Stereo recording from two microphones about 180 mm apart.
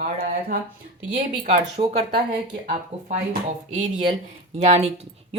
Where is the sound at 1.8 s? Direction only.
35° right (ahead or behind).